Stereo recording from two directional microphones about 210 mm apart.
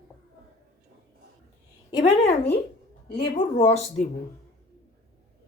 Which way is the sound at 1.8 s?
20° left (ahead or behind).